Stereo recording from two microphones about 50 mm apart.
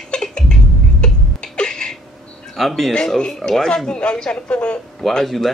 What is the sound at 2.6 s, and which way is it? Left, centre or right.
Speech, centre.